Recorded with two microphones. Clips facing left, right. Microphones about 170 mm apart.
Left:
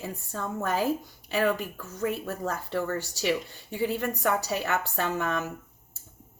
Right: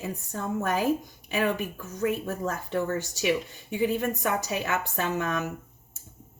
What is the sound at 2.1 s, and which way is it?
A woman's voice, 20° right (ahead or behind).